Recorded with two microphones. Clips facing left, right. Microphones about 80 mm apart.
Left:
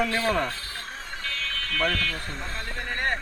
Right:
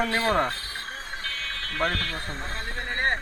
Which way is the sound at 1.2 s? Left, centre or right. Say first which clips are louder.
Left 4 dB; right.